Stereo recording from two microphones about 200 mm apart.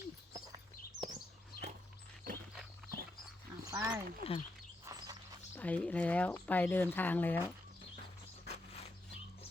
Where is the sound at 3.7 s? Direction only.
15° right (ahead or behind).